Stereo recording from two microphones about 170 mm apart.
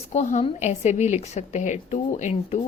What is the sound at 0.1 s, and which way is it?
A woman's voice, 40° left (ahead or behind).